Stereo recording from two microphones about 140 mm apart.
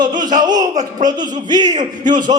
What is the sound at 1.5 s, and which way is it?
Speech, 30° right (ahead or behind).